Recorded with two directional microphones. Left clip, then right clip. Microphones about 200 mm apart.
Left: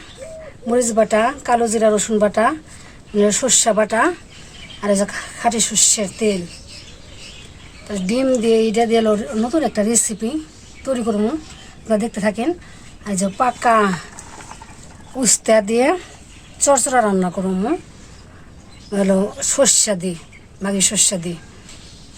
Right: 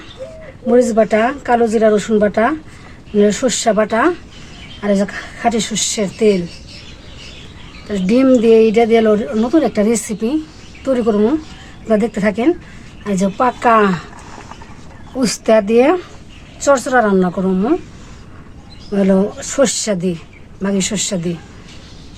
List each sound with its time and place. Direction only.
0.7 s a woman's voice: 5° left (ahead or behind)
5.5 s speech: centre (ahead or behind)
6.0 s speech: 15° right (ahead or behind)
7.9 s speech: 10° right (ahead or behind)
13.3 s speech: centre (ahead or behind)
15.1 s a woman's voice: 15° left (ahead or behind)
18.9 s a woman's voice: 10° left (ahead or behind)